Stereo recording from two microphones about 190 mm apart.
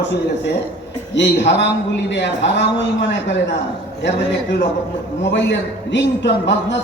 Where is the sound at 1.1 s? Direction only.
70° left (ahead or behind).